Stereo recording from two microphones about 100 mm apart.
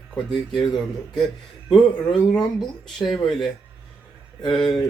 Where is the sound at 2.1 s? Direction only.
45° left (ahead or behind).